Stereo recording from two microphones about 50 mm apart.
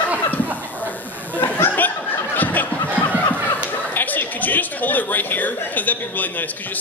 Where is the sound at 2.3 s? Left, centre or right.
Left.